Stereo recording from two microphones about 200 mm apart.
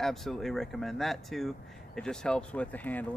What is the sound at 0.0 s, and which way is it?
Speech, centre (ahead or behind).